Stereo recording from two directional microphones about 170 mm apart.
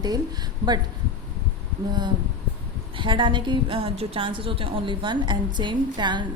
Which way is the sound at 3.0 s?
30° right (ahead or behind).